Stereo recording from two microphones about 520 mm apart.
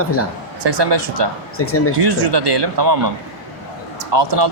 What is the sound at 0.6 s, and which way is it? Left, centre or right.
Speech, right.